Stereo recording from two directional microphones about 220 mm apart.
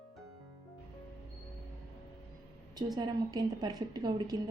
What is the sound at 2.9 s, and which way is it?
A woman's voice, 20° right (ahead or behind).